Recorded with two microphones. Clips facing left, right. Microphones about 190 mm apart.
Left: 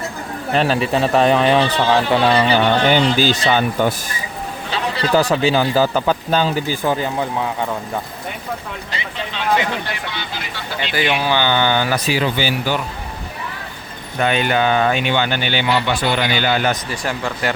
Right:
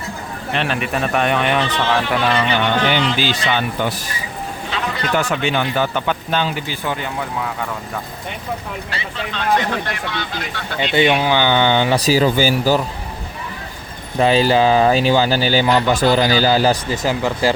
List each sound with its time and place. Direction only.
0.5 s speech: 35° left (ahead or behind)
4.7 s speech: 35° left (ahead or behind)
9.6 s speech: 5° left (ahead or behind)
11.2 s speech: 15° right (ahead or behind)
11.9 s speech: 40° right (ahead or behind)
14.2 s speech: 30° right (ahead or behind)